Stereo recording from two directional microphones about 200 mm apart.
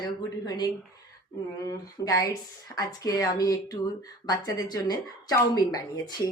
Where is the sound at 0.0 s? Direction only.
20° left (ahead or behind).